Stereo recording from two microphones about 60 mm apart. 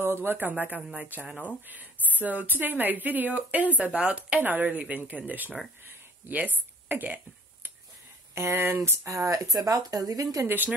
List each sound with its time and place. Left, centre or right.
0.0 s speech: right
5.9 s a sound: right
8.4 s speech: right
8.8 s speech: right
10.4 s speech: right